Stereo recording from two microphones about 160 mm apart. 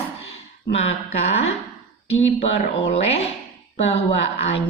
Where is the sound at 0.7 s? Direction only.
40° left (ahead or behind).